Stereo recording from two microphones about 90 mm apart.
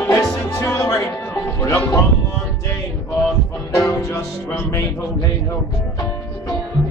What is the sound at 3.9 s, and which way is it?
Music, 35° left (ahead or behind).